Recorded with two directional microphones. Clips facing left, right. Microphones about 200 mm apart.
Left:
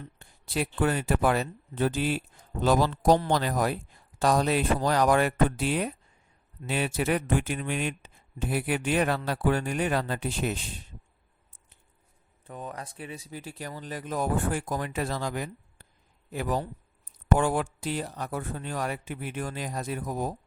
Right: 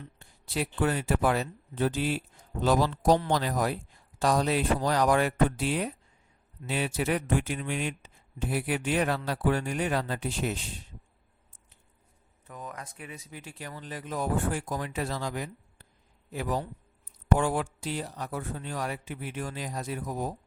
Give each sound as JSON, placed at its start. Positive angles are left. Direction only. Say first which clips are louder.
{"t": 0.2, "sound": "speech", "louder": "left 2 dB", "side_deg": 55}
{"t": 12.5, "sound": "speech", "louder": "left 3 dB", "side_deg": 30}